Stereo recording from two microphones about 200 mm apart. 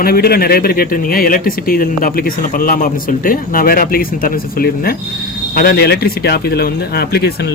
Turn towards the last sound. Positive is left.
turn(degrees=50)  # may be behind; listen again after turning